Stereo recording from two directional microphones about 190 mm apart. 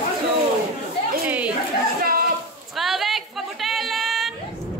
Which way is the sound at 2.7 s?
Centre (ahead or behind).